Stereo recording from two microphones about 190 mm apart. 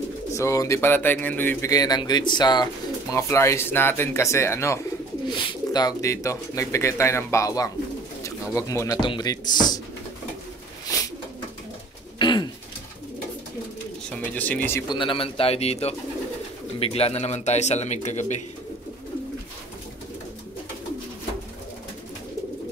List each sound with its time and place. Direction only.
0.3 s speech: 15° left (ahead or behind)
5.3 s speech: 25° left (ahead or behind)
9.0 s music: 20° left (ahead or behind)
12.2 s pigeon: 25° left (ahead or behind)
14.2 s speech: 10° left (ahead or behind)
15.0 s a man's voice: 25° left (ahead or behind)